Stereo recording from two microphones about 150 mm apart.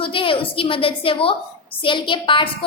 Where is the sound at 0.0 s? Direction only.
35° left (ahead or behind).